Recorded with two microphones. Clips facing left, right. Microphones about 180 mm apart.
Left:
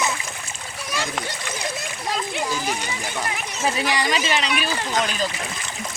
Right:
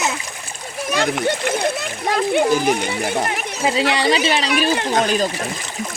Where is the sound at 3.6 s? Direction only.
20° right (ahead or behind).